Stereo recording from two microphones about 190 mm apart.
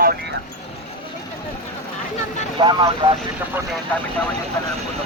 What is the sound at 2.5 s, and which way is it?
Speech, 25° right (ahead or behind).